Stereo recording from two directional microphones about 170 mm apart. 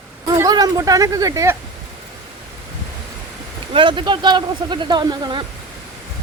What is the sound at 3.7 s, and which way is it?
Speech, 30° right (ahead or behind).